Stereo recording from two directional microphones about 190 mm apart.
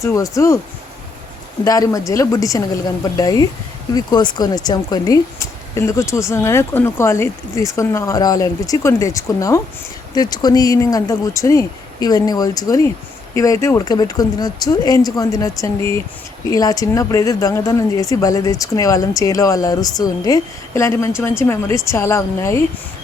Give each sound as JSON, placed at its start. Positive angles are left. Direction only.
{"t": 0.0, "sound": "speech", "side_deg": 15}
{"t": 1.6, "sound": "speech", "side_deg": 20}